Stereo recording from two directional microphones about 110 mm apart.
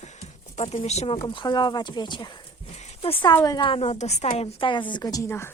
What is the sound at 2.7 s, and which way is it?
Horse, 70° left (ahead or behind).